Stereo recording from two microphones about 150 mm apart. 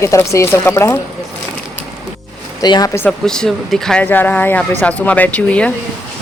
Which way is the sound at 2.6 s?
25° left (ahead or behind).